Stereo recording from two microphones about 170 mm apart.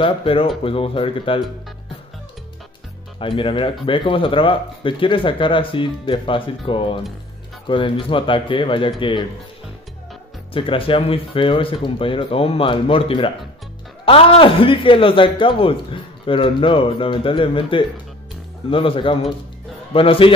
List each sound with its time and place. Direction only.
0.0 s speech: 35° left (ahead or behind)
3.2 s speech: 30° left (ahead or behind)
10.5 s speech: 30° left (ahead or behind)